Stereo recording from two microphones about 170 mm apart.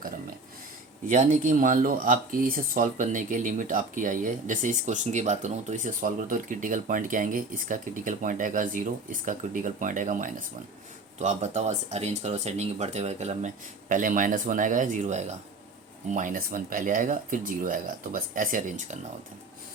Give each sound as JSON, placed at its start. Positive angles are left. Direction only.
{"t": 1.0, "sound": "speech", "side_deg": -50}